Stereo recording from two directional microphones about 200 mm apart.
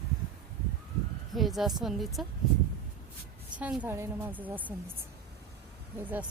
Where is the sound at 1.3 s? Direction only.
Centre (ahead or behind).